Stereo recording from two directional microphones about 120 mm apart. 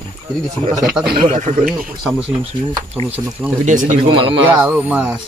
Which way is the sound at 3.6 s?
90° right.